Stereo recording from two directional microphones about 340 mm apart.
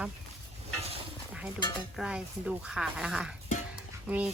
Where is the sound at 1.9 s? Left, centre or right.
Centre.